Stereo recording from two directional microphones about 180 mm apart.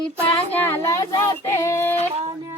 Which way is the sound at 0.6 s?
15° left (ahead or behind).